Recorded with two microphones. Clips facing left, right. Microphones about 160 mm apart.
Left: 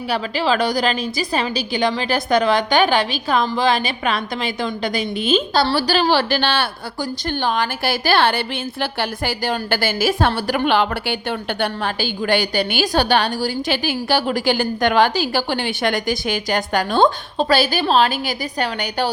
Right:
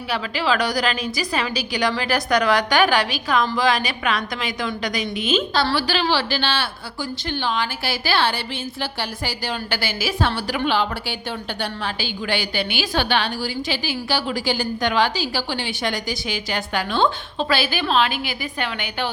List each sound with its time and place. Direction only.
0.1 s a woman's voice: 30° left (ahead or behind)